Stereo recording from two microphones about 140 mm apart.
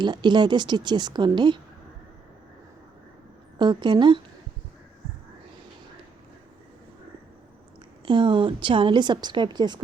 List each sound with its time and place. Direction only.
0.0 s a woman's voice: 30° right (ahead or behind)
3.6 s a woman's voice: 35° right (ahead or behind)
8.0 s a woman's voice: 35° right (ahead or behind)